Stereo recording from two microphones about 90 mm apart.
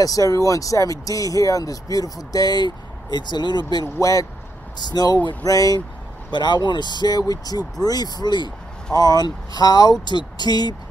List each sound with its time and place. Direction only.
0.0 s speech: 40° left (ahead or behind)
3.8 s speech: 40° left (ahead or behind)
4.7 s speech: 50° left (ahead or behind)
6.3 s speech: 55° left (ahead or behind)